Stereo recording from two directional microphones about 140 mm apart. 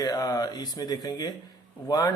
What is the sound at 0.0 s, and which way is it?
A man's voice, 30° left (ahead or behind).